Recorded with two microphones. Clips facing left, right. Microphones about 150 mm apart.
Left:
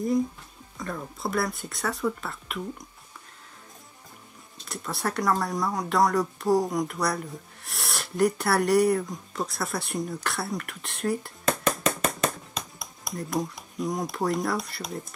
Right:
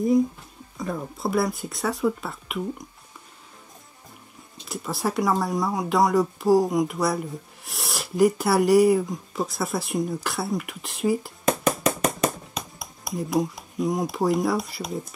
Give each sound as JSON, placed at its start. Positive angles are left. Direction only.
{"t": 0.7, "sound": "speech", "side_deg": -10}
{"t": 4.6, "sound": "speech", "side_deg": 0}